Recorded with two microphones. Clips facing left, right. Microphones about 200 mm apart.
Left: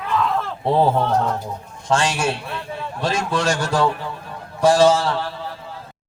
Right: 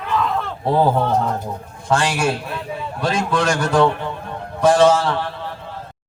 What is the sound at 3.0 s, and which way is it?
A man's voice, 30° left (ahead or behind).